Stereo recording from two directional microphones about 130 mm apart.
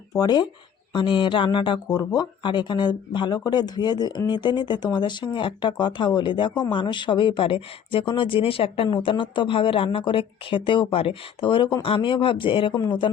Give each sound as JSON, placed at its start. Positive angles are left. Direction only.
{"t": 0.1, "sound": "speech", "side_deg": 30}